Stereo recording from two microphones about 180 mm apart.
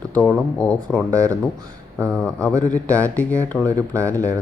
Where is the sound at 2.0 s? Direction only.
5° left (ahead or behind).